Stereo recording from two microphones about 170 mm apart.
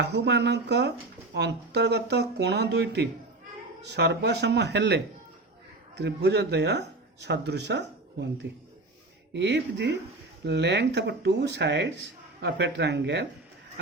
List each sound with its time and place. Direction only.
0.0 s speech: 80° right
9.3 s speech: 90° right